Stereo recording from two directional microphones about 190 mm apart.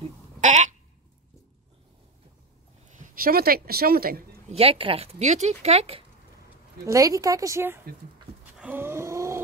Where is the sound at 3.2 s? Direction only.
50° right (ahead or behind).